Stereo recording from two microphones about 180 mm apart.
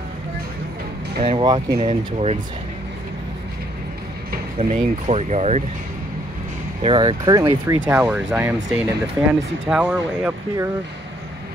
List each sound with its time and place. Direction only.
1.2 s speech: 25° right (ahead or behind)
4.6 s speech: 35° right (ahead or behind)
6.8 s speech: 30° right (ahead or behind); by 10.3 s 5° right (ahead or behind)